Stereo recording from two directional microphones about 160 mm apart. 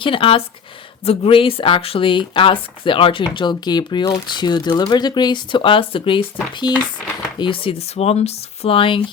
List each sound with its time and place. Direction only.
0.0 s speech: 35° left (ahead or behind)